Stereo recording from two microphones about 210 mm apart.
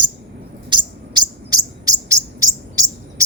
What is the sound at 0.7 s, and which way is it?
Bird, 20° right (ahead or behind).